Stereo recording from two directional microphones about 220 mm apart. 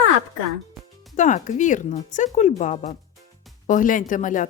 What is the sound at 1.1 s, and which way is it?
Speech, 35° left (ahead or behind).